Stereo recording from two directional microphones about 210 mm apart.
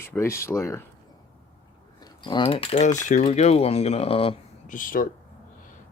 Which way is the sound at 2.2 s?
25° left (ahead or behind).